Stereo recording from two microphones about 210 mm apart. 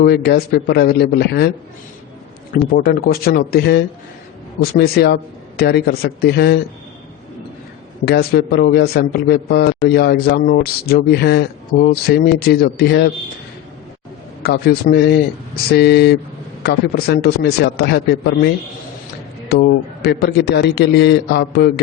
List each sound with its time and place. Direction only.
0.0 s a man's voice: 50° left (ahead or behind)
8.0 s a man's voice: 50° left (ahead or behind)
14.4 s a man's voice: 50° left (ahead or behind)